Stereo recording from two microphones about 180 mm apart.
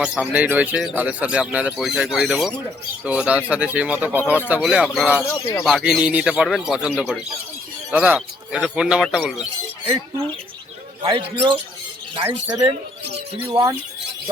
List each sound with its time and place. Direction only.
0.0 s speech: 5° right (ahead or behind)
11.0 s speech: 25° right (ahead or behind)